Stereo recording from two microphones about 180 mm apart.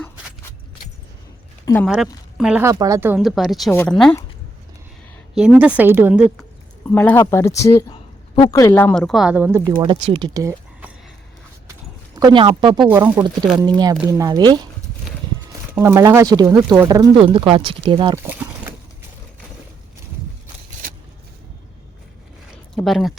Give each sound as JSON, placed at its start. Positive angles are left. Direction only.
{"t": 1.7, "sound": "speech", "side_deg": 20}
{"t": 2.4, "sound": "speech", "side_deg": -10}
{"t": 3.2, "sound": "speech", "side_deg": 0}
{"t": 3.7, "sound": "speech", "side_deg": 10}
{"t": 3.9, "sound": "speech", "side_deg": 0}
{"t": 5.3, "sound": "speech", "side_deg": -5}
{"t": 6.9, "sound": "speech", "side_deg": 10}
{"t": 11.7, "sound": "a sound", "side_deg": -20}
{"t": 13.0, "sound": "speech", "side_deg": -10}
{"t": 13.6, "sound": "speech", "side_deg": -25}
{"t": 15.8, "sound": "speech", "side_deg": -15}
{"t": 18.2, "sound": "a sound", "side_deg": -10}
{"t": 22.7, "sound": "speech", "side_deg": 0}